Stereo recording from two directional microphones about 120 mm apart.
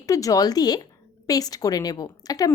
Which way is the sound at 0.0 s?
30° left (ahead or behind).